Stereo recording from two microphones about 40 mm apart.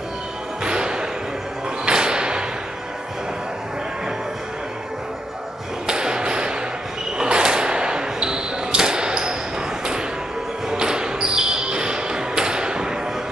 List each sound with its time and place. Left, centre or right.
0.7 s a sound: right
5.9 s thump: centre
7.2 s basketball bounce: right
10.7 s basketball bounce: centre